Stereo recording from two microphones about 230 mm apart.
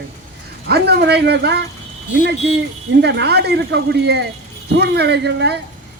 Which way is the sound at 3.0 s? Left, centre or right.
Right.